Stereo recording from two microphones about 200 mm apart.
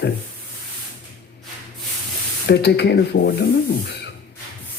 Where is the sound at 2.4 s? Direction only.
55° left (ahead or behind).